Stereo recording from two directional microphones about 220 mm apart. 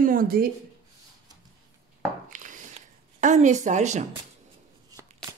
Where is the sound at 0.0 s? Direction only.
40° right (ahead or behind).